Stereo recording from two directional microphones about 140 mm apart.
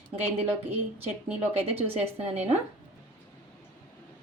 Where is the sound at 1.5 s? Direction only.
45° right (ahead or behind).